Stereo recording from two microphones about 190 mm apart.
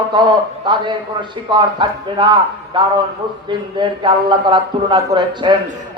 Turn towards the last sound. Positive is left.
turn(degrees=-25)  # may be behind; listen again after turning